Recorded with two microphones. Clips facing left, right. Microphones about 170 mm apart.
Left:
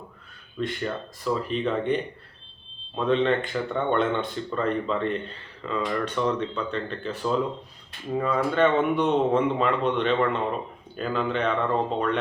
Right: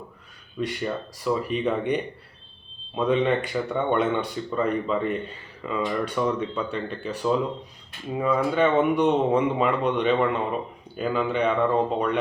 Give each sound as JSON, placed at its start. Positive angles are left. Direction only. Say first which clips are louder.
{"t": 0.8, "sound": "speech", "louder": "right 1 dB", "side_deg": -5}
{"t": 3.1, "sound": "speech", "louder": "even", "side_deg": -15}